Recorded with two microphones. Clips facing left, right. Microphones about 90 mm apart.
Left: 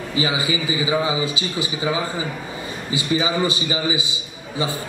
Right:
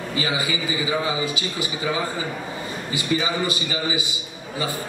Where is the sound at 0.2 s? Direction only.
20° left (ahead or behind).